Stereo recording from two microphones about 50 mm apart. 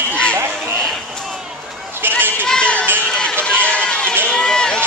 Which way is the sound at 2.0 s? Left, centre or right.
Right.